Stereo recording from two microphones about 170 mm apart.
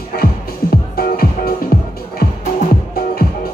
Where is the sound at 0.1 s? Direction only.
60° left (ahead or behind).